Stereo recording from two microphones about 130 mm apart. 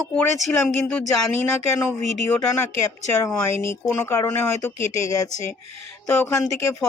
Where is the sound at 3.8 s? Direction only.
20° left (ahead or behind).